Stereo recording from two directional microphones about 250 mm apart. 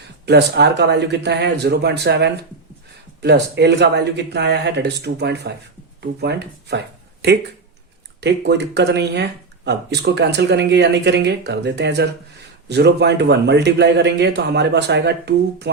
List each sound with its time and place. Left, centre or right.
0.3 s a man's voice: right